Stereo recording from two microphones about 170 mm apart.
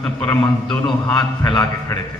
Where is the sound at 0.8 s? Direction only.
25° left (ahead or behind).